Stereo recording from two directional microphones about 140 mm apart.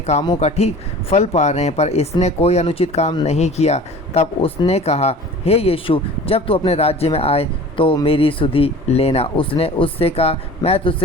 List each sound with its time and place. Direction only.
0.0 s speech: 50° left (ahead or behind)